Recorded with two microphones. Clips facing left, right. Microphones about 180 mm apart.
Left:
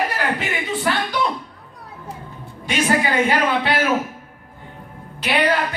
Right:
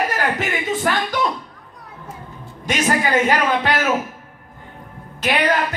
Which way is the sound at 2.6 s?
45° right (ahead or behind).